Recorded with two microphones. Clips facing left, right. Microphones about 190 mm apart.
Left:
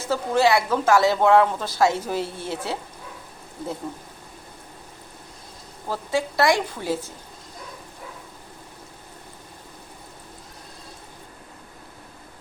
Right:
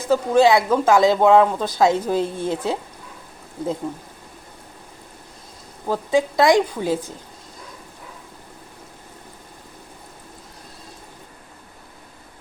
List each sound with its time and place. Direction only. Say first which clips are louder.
0.0 s speech: right 5 dB; 15° right (ahead or behind)
5.9 s speech: right 6 dB; 15° right (ahead or behind)